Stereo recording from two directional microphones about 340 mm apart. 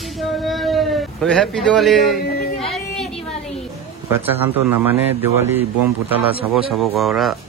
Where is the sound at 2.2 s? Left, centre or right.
Left.